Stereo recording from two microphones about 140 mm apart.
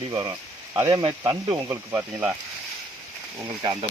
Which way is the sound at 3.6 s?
30° right (ahead or behind).